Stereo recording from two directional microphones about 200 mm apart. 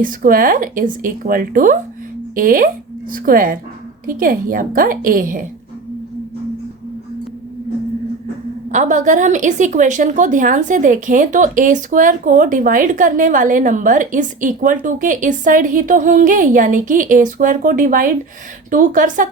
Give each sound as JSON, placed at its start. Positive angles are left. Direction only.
{"t": 0.0, "sound": "speech", "side_deg": -45}
{"t": 8.7, "sound": "a woman's voice", "side_deg": -40}